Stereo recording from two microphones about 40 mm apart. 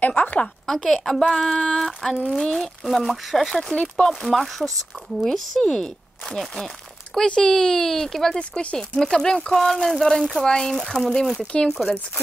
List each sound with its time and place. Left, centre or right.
0.0 s a woman's voice: left
0.7 s speech: centre
5.6 s speech: centre
8.4 s speech: left
8.7 s speech: centre